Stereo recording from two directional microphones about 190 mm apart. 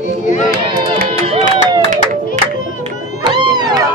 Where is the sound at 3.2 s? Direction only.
25° right (ahead or behind).